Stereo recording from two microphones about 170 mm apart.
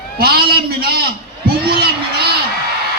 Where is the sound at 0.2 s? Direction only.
65° right (ahead or behind).